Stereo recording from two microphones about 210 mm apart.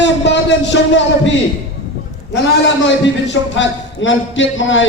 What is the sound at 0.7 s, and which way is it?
Speech, 60° left (ahead or behind).